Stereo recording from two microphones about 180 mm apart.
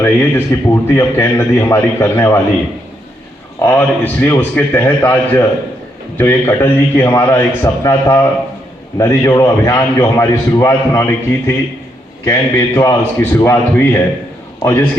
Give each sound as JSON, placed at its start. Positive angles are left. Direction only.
{"t": 0.0, "sound": "a man's voice", "side_deg": 10}
{"t": 3.6, "sound": "a man's voice", "side_deg": 10}